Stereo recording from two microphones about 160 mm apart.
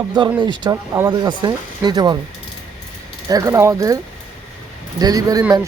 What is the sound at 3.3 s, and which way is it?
Speech, 20° right (ahead or behind).